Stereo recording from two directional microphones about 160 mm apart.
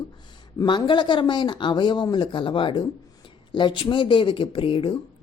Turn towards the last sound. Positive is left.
turn(degrees=30)  # may be behind; listen again after turning